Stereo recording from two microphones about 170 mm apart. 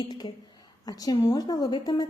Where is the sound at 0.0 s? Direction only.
25° left (ahead or behind).